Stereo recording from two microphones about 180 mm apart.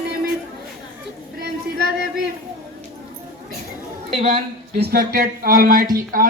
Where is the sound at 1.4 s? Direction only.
65° right (ahead or behind).